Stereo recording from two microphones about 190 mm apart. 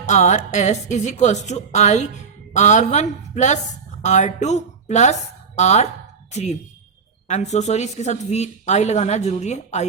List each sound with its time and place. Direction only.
0.0 s speech: 40° left (ahead or behind)